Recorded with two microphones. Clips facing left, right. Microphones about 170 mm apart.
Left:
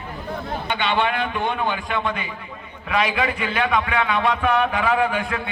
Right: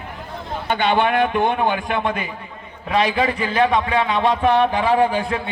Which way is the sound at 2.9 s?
35° right (ahead or behind).